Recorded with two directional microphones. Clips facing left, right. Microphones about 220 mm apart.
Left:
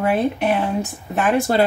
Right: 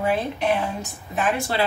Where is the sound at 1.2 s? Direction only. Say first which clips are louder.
Left 6 dB; 45° left (ahead or behind).